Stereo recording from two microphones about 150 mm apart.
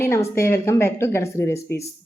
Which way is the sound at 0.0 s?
20° left (ahead or behind).